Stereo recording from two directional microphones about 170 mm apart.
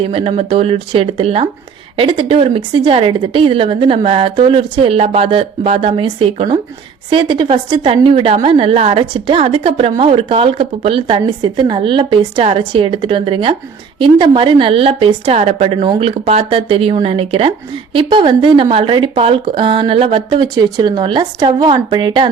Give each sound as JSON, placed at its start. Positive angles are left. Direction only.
{"t": 0.0, "sound": "a woman's voice", "side_deg": -35}